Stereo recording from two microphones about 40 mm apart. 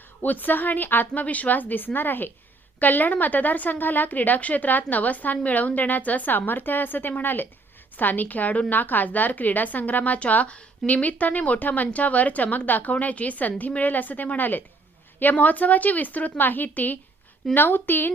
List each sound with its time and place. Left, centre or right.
0.2 s a woman's voice: left
1.2 s a woman's voice: left